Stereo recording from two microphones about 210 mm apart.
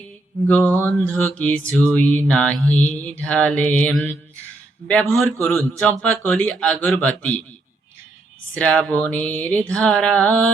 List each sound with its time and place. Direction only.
0.4 s mantra: 5° left (ahead or behind)
8.5 s mantra: 5° left (ahead or behind)